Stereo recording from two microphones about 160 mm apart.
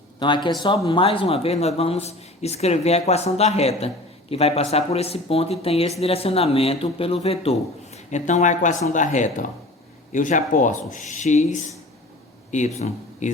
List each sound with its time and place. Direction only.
0.2 s speech: 30° left (ahead or behind); by 13.3 s 45° left (ahead or behind)